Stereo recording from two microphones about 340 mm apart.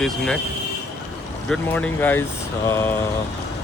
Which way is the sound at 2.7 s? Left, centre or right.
Centre.